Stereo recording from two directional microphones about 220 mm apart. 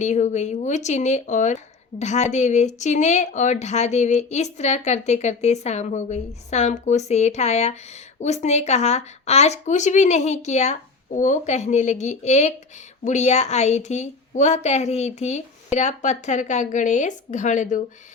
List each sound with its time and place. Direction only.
0.0 s speech: 30° left (ahead or behind)